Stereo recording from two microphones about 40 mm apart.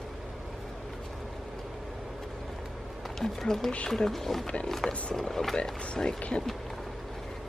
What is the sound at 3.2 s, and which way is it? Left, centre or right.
Speech, centre.